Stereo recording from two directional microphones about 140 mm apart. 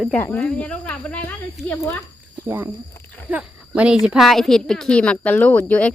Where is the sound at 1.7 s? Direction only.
20° left (ahead or behind).